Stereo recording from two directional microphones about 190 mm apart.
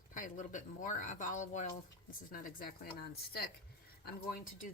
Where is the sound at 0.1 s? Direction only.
40° left (ahead or behind).